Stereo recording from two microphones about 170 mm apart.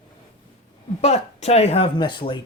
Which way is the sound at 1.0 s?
40° left (ahead or behind).